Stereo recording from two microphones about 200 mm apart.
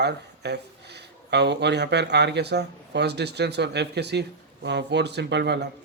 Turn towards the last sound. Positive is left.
turn(degrees=-55)  # may be behind; listen again after turning